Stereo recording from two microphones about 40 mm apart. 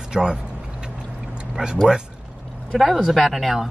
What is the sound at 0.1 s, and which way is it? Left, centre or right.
Speech, centre.